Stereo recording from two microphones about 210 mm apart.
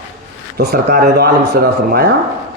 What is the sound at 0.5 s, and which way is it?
Speech, 50° right (ahead or behind).